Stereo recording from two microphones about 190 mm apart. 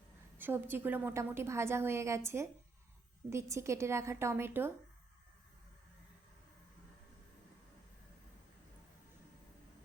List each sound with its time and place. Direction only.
0.3 s a woman's voice: 10° right (ahead or behind)